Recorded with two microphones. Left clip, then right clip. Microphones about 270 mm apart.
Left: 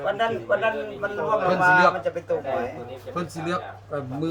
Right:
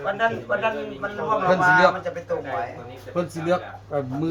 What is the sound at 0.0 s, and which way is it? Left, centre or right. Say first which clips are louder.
A man's voice: right 1 dB; left.